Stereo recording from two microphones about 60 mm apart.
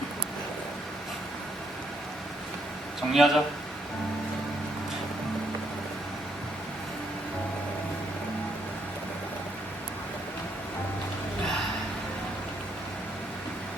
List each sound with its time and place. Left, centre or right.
3.1 s speech: centre